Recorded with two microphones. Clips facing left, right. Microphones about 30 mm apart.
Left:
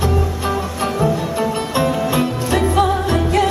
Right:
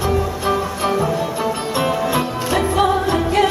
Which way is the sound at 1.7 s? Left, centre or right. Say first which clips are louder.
Left 1 dB; centre.